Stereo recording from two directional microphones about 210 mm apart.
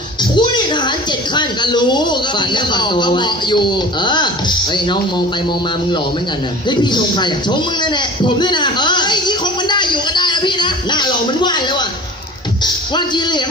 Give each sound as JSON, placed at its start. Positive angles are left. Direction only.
{"t": 0.2, "sound": "a woman's voice", "side_deg": 20}
{"t": 6.7, "sound": "a man's voice", "side_deg": 20}
{"t": 12.9, "sound": "a man's voice", "side_deg": 20}